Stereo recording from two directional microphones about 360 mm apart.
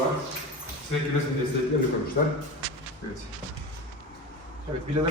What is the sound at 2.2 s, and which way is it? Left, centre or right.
Speech, left.